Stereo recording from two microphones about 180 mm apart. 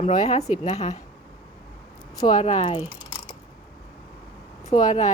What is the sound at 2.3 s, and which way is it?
Speech, 35° left (ahead or behind).